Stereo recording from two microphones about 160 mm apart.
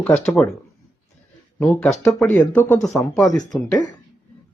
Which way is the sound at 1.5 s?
10° left (ahead or behind).